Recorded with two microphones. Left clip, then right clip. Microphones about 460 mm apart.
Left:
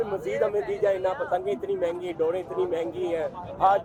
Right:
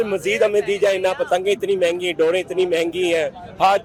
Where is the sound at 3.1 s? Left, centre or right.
Right.